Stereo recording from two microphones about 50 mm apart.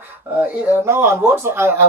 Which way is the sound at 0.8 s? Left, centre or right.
Right.